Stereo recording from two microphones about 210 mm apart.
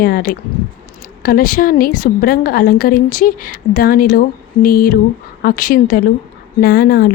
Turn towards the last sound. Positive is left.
turn(degrees=45)  # may be behind; listen again after turning